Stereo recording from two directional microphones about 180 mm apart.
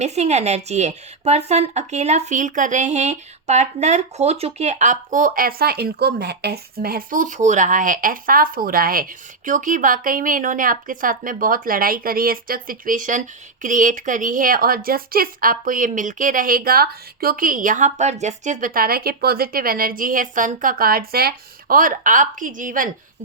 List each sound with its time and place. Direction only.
0.0 s speech: 35° right (ahead or behind)